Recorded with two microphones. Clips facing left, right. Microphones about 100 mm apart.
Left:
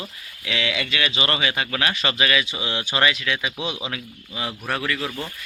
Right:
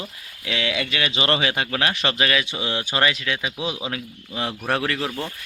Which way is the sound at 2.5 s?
15° left (ahead or behind).